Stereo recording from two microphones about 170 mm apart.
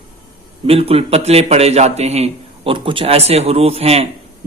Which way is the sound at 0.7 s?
35° right (ahead or behind).